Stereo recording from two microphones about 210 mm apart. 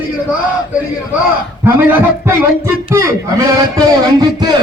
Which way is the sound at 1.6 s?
10° right (ahead or behind).